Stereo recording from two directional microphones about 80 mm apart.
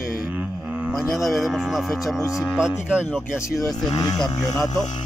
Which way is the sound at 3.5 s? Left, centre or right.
Centre.